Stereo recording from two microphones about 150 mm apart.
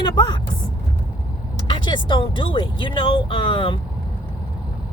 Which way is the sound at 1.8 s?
35° left (ahead or behind).